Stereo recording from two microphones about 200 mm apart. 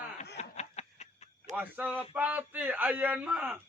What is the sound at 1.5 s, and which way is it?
Speech, 10° right (ahead or behind).